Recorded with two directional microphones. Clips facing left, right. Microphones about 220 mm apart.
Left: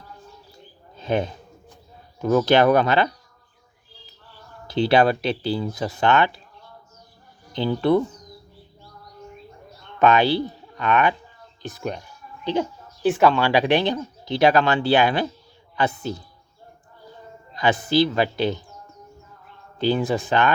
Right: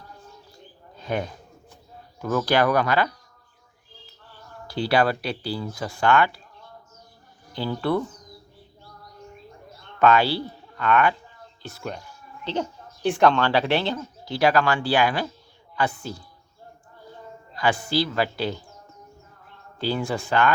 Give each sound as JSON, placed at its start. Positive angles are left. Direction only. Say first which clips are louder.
{"t": 0.9, "sound": "a sound", "louder": "left 4 dB", "side_deg": 25}
{"t": 2.2, "sound": "speech", "louder": "left 5 dB", "side_deg": 20}
{"t": 4.7, "sound": "speech", "louder": "left 4 dB", "side_deg": 20}
{"t": 7.5, "sound": "speech", "louder": "left 5 dB", "side_deg": 20}
{"t": 10.0, "sound": "speech", "louder": "left 2 dB", "side_deg": 20}
{"t": 11.6, "sound": "music", "louder": "left 4 dB", "side_deg": 15}
{"t": 13.0, "sound": "speech", "louder": "left 2 dB", "side_deg": 5}
{"t": 17.5, "sound": "speech", "louder": "left 3 dB", "side_deg": 20}
{"t": 19.8, "sound": "speech", "louder": "left 5 dB", "side_deg": 20}